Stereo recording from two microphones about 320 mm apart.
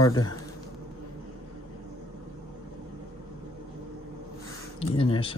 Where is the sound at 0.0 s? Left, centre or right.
Centre.